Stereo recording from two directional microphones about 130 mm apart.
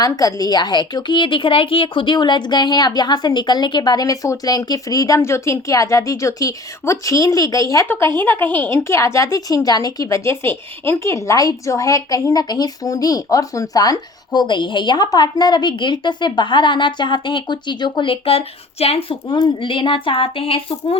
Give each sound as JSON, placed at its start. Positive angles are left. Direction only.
{"t": 0.0, "sound": "a woman's voice", "side_deg": 30}